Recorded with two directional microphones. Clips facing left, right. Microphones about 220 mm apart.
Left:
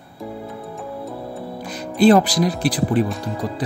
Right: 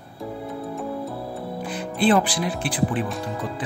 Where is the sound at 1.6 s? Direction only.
40° left (ahead or behind).